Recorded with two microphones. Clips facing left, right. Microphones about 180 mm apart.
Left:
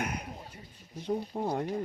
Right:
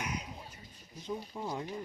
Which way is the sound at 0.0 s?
55° left (ahead or behind).